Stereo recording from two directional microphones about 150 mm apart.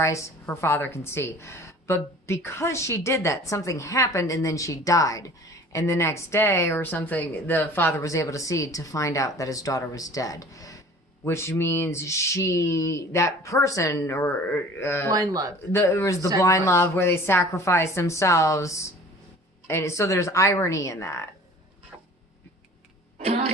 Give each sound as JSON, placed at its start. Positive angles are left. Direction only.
{"t": 0.0, "sound": "speech", "side_deg": 20}
{"t": 15.1, "sound": "speech", "side_deg": -25}
{"t": 15.7, "sound": "speech", "side_deg": 20}
{"t": 23.1, "sound": "vehicle", "side_deg": -45}